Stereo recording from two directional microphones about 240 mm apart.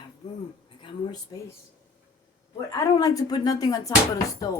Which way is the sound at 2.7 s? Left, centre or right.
Centre.